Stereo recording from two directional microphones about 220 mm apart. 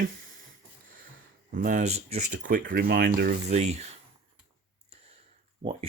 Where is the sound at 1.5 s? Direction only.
35° right (ahead or behind).